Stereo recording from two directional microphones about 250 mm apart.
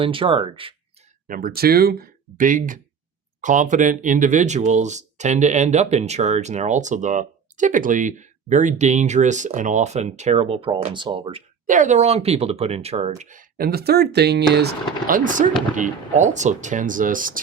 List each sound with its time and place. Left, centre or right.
0.0 s speech: right
1.3 s speech: right